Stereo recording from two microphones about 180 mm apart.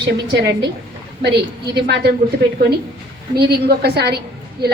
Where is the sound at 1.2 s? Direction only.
65° right (ahead or behind).